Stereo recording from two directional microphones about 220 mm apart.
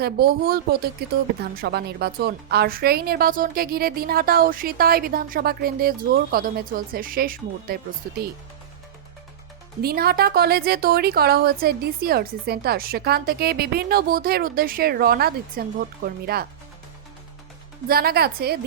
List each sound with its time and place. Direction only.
0.0 s a woman's voice: 45° right (ahead or behind)
9.8 s a woman's voice: 45° right (ahead or behind)
17.8 s a woman's voice: 45° right (ahead or behind)